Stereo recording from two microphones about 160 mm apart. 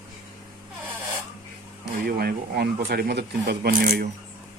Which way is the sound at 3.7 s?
65° right (ahead or behind).